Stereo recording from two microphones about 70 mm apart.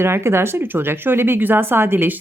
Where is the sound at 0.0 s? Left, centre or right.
Right.